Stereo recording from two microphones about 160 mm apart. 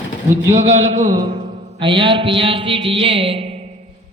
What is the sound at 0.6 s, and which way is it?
Speech, 45° right (ahead or behind).